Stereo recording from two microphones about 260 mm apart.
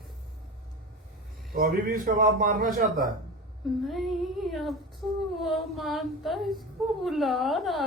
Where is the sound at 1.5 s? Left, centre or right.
Right.